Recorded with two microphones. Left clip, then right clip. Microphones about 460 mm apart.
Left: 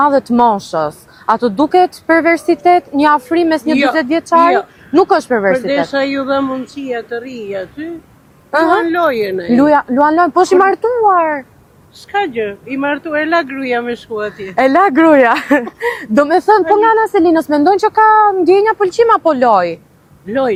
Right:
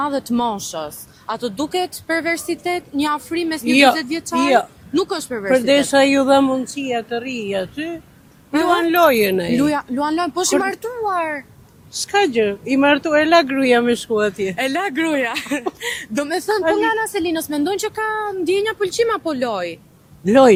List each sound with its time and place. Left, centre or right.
0.0 s speech: centre
0.8 s a woman's voice: left
4.4 s speech: right
4.9 s speech: centre
5.5 s speech: right
9.6 s a woman's voice: left
12.1 s speech: right
14.6 s speech: left
16.1 s a woman's voice: left
20.2 s speech: right